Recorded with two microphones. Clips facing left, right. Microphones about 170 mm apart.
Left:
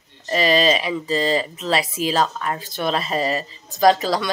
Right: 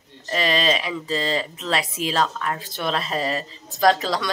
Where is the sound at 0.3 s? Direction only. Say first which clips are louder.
Left 4 dB; 5° left (ahead or behind).